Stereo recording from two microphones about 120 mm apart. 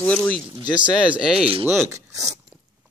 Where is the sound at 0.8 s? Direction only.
10° right (ahead or behind).